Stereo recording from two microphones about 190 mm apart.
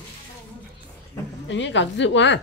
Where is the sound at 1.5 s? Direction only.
70° left (ahead or behind).